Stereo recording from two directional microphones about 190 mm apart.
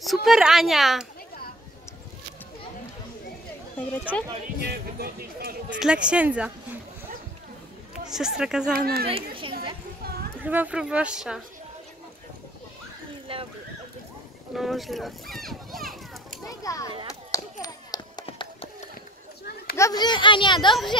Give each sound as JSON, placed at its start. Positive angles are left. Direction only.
{"t": 0.0, "sound": "a woman's voice", "side_deg": 0}
{"t": 4.1, "sound": "speech", "side_deg": -5}
{"t": 4.6, "sound": "speech", "side_deg": -55}
{"t": 5.8, "sound": "a woman's voice", "side_deg": -5}
{"t": 8.1, "sound": "a woman's voice", "side_deg": -5}
{"t": 8.7, "sound": "speech", "side_deg": -55}
{"t": 9.1, "sound": "speech", "side_deg": -30}
{"t": 10.4, "sound": "a woman's voice", "side_deg": -10}
{"t": 13.3, "sound": "speech", "side_deg": -30}
{"t": 14.5, "sound": "a child's voice", "side_deg": 0}
{"t": 16.4, "sound": "children playing", "side_deg": 15}
{"t": 17.1, "sound": "a sound", "side_deg": 20}
{"t": 18.2, "sound": "hands", "side_deg": 30}
{"t": 19.8, "sound": "speech", "side_deg": 20}